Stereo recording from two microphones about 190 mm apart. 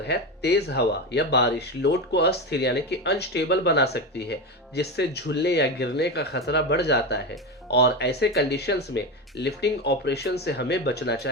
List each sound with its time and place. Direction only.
0.0 s speech: 60° left (ahead or behind)